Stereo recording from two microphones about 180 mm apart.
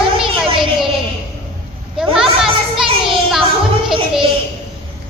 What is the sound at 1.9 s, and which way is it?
Children playing, 5° right (ahead or behind).